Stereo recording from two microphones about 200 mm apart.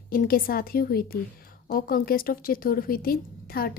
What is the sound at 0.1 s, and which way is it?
A woman's voice, 45° left (ahead or behind).